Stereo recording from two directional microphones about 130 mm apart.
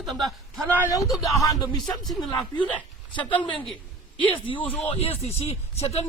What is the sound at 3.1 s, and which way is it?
A woman's voice, 40° left (ahead or behind).